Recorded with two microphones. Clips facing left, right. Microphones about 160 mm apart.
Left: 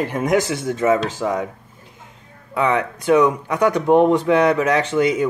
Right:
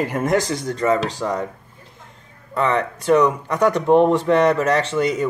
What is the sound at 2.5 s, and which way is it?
Speech, 5° left (ahead or behind).